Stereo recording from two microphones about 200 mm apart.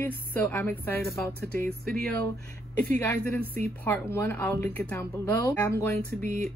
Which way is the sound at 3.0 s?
10° left (ahead or behind).